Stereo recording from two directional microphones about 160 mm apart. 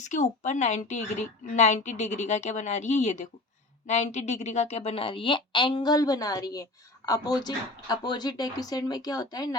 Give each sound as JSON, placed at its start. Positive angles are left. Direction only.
{"t": 0.0, "sound": "a woman's voice", "side_deg": 50}